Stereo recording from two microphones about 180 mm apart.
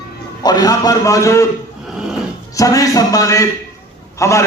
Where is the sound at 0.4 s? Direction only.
20° left (ahead or behind).